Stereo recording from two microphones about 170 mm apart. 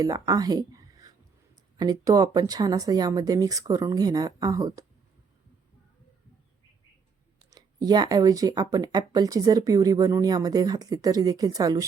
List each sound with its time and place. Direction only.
0.0 s speech: 20° right (ahead or behind)
7.5 s speech: 25° right (ahead or behind)